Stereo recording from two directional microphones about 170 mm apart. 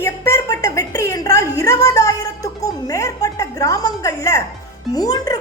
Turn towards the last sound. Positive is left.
turn(degrees=20)  # may be behind; listen again after turning